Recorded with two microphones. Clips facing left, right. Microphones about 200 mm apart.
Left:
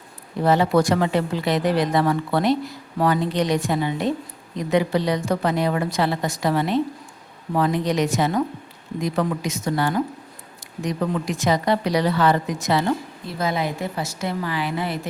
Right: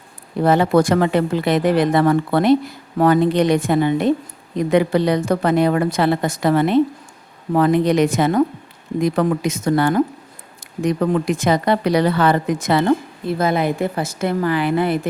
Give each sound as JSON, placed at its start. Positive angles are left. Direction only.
{"t": 0.4, "sound": "speech", "side_deg": -55}